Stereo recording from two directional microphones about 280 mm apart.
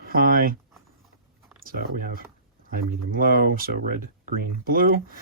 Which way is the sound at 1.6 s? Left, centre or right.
Right.